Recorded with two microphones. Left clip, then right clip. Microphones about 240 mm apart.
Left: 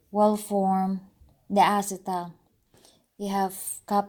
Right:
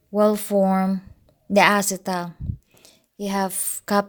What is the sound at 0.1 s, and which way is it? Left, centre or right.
Speech, right.